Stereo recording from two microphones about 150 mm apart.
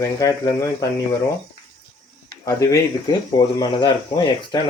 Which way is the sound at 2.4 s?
25° left (ahead or behind).